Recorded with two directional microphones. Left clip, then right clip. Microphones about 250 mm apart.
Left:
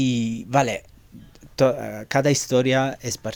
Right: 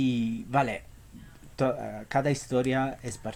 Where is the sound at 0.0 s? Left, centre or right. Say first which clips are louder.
Left 5 dB; left.